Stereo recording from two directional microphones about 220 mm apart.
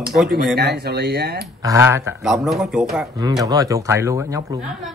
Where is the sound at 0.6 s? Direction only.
50° right (ahead or behind).